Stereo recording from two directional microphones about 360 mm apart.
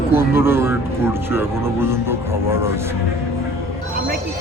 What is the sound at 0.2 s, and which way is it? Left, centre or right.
Speech, centre.